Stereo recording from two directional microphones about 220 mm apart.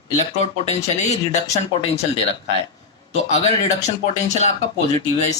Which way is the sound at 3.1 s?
30° left (ahead or behind).